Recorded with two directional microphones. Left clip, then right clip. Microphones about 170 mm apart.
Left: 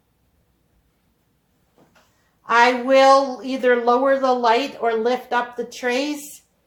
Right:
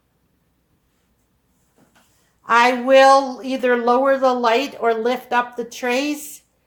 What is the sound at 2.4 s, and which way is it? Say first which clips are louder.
A man's voice: right 1 dB; 35° right (ahead or behind).